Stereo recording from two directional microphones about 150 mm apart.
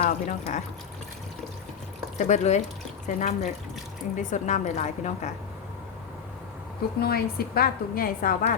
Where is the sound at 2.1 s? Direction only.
50° left (ahead or behind).